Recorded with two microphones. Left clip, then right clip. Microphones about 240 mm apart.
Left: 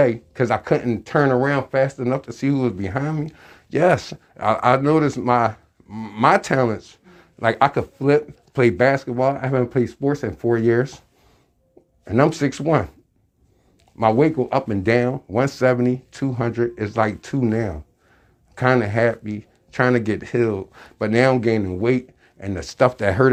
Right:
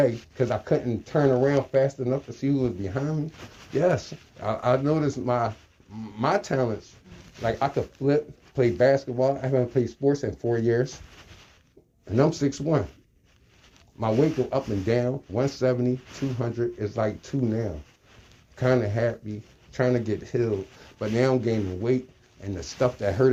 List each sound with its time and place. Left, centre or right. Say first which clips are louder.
0.0 s speech: left 5 dB; left
12.0 s speech: left 5 dB; left
14.0 s speech: left 7 dB; left